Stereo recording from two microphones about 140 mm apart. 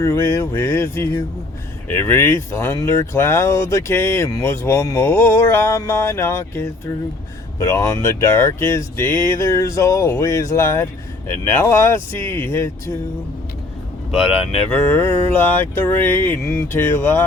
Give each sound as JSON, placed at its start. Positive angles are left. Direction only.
{"t": 0.0, "sound": "speech", "side_deg": 20}
{"t": 14.7, "sound": "speech", "side_deg": 15}